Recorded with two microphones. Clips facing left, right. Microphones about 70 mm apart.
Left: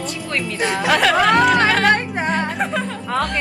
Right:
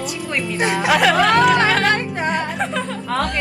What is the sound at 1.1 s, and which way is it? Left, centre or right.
Speech, centre.